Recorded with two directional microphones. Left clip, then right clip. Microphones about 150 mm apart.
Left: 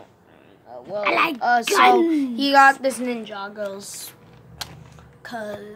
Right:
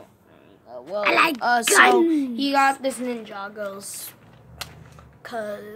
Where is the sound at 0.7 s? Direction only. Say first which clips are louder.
Right 1 dB; 5° left (ahead or behind).